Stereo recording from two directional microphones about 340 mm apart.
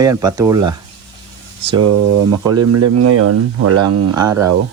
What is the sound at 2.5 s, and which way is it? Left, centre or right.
Speech, right.